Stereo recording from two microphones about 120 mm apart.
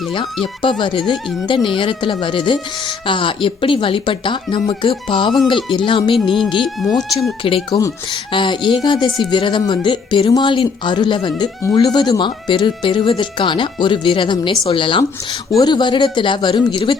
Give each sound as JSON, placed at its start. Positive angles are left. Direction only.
{"t": 0.6, "sound": "speech", "side_deg": 40}
{"t": 6.1, "sound": "speech", "side_deg": 0}
{"t": 7.7, "sound": "speech", "side_deg": 25}
{"t": 8.3, "sound": "speech", "side_deg": 45}